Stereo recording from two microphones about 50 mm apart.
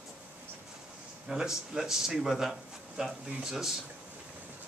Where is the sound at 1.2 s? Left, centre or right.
Centre.